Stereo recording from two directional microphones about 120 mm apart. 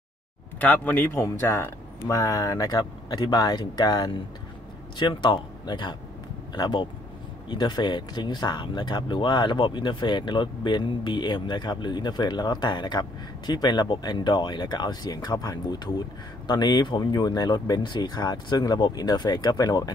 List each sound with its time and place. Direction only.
0.6 s speech: 15° left (ahead or behind); by 19.9 s 30° left (ahead or behind)